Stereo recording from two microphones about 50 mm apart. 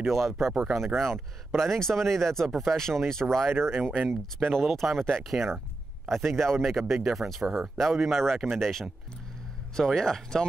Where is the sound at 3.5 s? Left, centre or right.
Right.